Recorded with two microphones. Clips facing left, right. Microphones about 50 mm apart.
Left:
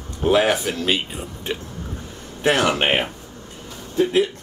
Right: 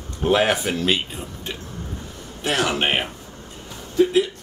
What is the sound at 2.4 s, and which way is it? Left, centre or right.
Speech, left.